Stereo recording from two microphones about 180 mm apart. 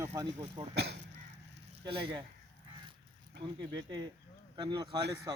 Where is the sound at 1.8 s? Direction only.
25° right (ahead or behind).